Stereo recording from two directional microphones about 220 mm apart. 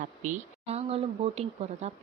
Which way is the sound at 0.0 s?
35° right (ahead or behind).